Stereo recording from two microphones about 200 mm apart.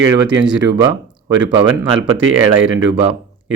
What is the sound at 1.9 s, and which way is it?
Speech, 25° right (ahead or behind).